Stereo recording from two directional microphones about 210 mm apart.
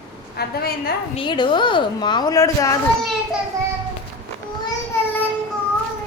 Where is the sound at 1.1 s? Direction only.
20° left (ahead or behind).